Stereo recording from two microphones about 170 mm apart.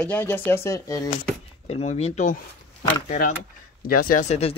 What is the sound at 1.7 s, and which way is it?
Speech, 40° left (ahead or behind).